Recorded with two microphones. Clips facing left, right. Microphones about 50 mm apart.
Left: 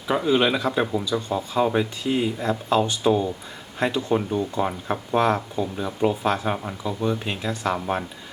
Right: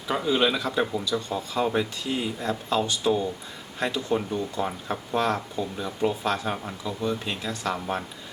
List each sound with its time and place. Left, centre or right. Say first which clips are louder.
0.1 s speech: left 3 dB; centre